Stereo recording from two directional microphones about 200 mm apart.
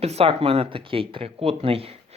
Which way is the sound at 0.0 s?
30° right (ahead or behind).